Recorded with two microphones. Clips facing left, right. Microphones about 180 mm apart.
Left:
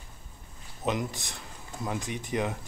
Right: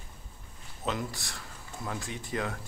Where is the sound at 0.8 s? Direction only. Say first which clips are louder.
Left 3 dB; 20° left (ahead or behind).